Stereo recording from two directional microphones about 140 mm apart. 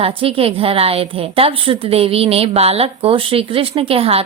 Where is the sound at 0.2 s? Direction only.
45° right (ahead or behind).